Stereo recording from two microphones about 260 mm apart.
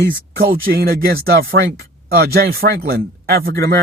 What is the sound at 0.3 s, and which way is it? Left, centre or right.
Speech, right.